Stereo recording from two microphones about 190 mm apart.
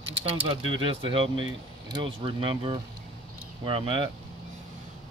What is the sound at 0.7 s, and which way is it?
Speech, 30° right (ahead or behind).